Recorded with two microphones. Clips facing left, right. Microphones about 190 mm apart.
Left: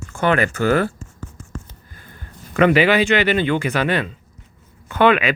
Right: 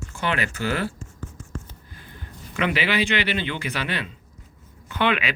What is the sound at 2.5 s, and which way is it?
Speech, 50° left (ahead or behind).